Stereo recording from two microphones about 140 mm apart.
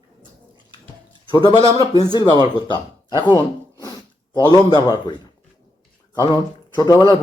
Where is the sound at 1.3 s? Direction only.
30° left (ahead or behind).